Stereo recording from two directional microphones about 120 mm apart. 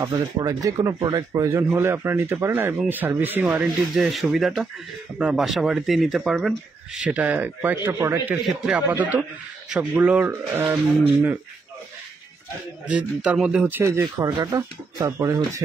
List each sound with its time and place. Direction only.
0.0 s speech: 30° right (ahead or behind); by 3.4 s 15° right (ahead or behind)
3.4 s speech: 5° right (ahead or behind)
7.1 s speech: 15° right (ahead or behind)
12.8 s speech: 10° right (ahead or behind)
14.3 s speech: 35° right (ahead or behind)